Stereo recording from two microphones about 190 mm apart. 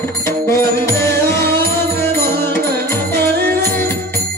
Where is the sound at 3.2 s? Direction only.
55° right (ahead or behind).